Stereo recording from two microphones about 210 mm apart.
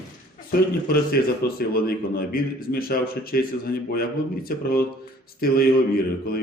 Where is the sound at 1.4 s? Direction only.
45° left (ahead or behind).